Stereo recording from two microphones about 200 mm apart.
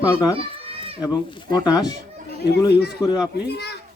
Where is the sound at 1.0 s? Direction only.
20° left (ahead or behind).